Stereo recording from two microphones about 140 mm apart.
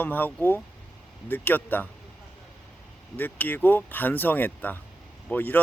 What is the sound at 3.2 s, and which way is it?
Speech, 15° left (ahead or behind).